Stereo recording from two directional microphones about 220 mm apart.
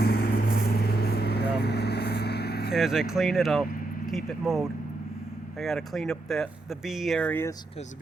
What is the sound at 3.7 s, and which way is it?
Vehicle, 40° left (ahead or behind).